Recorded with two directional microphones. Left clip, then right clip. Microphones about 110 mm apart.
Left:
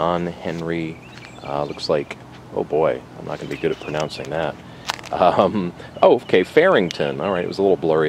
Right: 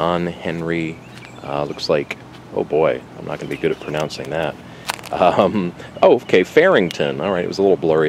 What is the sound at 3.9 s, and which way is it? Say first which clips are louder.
Speech: right 2 dB; 10° right (ahead or behind).